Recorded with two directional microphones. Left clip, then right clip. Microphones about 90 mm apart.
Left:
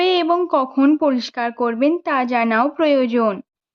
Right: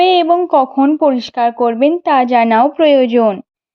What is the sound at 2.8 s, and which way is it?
Speech, 20° right (ahead or behind).